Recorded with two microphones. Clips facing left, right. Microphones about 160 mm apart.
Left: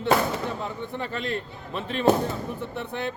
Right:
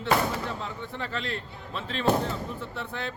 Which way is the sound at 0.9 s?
15° left (ahead or behind).